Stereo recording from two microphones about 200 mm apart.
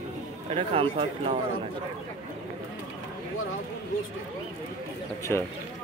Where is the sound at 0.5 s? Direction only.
25° right (ahead or behind).